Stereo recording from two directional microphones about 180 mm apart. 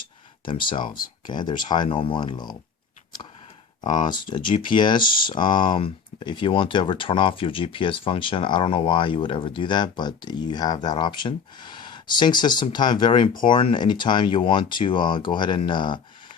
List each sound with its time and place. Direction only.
0.4 s speech: 25° left (ahead or behind)
3.8 s speech: 25° left (ahead or behind)